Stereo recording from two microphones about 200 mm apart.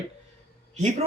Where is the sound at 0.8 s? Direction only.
35° right (ahead or behind).